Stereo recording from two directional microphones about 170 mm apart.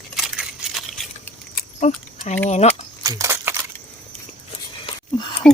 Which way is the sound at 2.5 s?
40° left (ahead or behind).